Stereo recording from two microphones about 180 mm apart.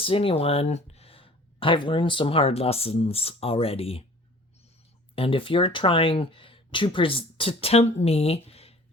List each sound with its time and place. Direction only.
0.0 s speech: 30° left (ahead or behind)
5.1 s speech: 30° left (ahead or behind)